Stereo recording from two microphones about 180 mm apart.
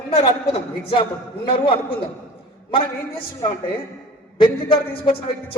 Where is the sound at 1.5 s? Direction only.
30° left (ahead or behind).